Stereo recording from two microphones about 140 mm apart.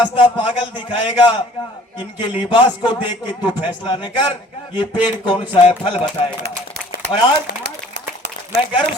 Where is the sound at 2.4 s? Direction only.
30° left (ahead or behind).